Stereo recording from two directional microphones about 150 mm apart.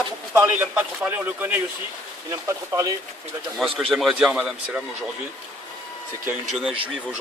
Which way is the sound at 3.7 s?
Centre (ahead or behind).